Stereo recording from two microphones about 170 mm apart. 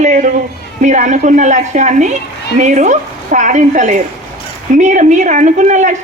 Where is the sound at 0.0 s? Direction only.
45° right (ahead or behind).